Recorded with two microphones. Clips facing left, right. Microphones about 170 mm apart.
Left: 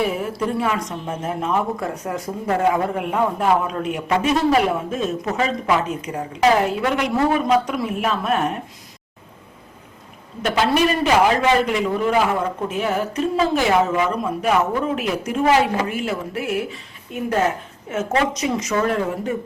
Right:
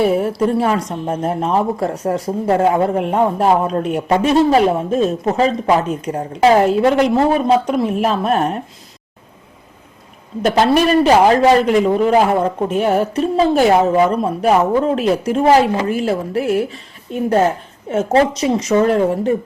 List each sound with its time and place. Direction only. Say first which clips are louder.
0.0 s speech: right 7 dB; 35° right (ahead or behind)
10.4 s speech: right 5 dB; 40° right (ahead or behind)